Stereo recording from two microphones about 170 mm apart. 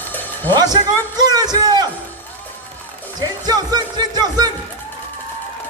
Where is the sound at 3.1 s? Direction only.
25° right (ahead or behind).